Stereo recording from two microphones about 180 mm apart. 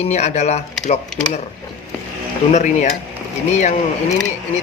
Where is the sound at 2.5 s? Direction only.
40° left (ahead or behind).